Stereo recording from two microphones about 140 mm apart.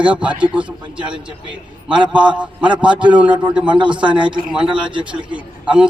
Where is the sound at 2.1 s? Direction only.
10° right (ahead or behind).